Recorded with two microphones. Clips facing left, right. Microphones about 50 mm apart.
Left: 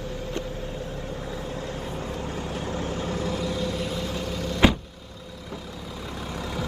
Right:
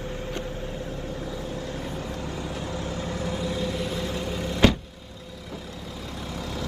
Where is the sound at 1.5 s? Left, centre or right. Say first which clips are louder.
Even; left.